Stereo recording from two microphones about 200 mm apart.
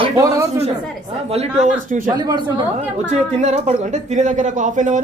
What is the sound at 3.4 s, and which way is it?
Speech, 35° right (ahead or behind).